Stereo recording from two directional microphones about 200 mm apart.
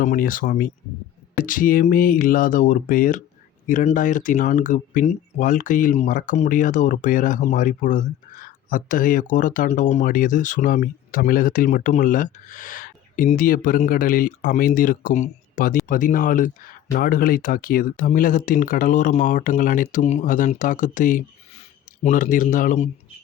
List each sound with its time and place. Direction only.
0.0 s speech: 40° left (ahead or behind)